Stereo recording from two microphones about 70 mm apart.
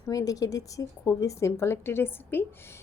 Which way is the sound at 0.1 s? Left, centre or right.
Left.